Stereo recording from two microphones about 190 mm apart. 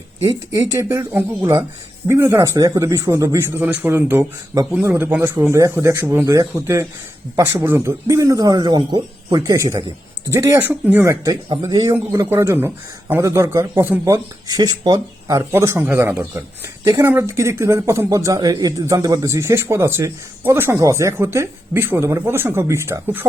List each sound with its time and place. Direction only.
0.2 s speech: 20° right (ahead or behind)